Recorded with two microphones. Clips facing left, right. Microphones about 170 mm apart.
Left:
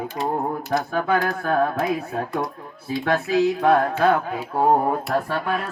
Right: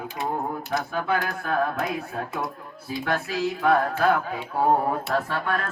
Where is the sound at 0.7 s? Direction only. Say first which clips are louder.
Left 4 dB; centre (ahead or behind).